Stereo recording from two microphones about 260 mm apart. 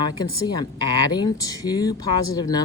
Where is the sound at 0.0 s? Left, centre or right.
Centre.